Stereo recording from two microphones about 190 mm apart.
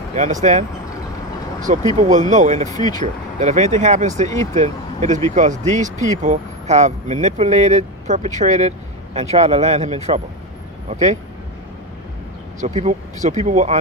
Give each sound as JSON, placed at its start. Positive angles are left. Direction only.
{"t": 0.1, "sound": "speech", "side_deg": -40}
{"t": 2.0, "sound": "speech", "side_deg": -40}
{"t": 2.7, "sound": "speech", "side_deg": 20}
{"t": 3.0, "sound": "speech", "side_deg": -40}
{"t": 12.5, "sound": "speech", "side_deg": -35}